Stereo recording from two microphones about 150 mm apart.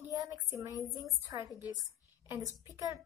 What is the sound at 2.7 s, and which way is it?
Speech, 20° right (ahead or behind).